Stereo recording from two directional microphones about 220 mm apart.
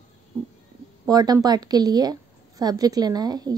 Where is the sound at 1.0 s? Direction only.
20° right (ahead or behind).